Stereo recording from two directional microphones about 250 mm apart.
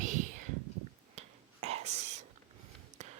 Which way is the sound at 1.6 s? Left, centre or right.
Right.